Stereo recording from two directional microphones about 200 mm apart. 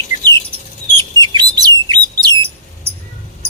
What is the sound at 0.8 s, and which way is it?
Bird, 35° left (ahead or behind).